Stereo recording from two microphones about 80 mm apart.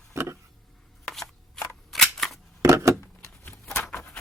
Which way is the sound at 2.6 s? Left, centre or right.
Right.